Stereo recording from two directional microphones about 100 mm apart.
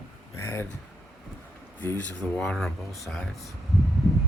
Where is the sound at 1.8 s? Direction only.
20° left (ahead or behind).